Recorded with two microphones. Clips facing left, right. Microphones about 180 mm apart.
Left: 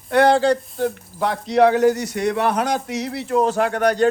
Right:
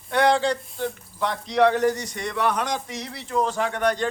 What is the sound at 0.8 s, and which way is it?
Speech, 35° left (ahead or behind).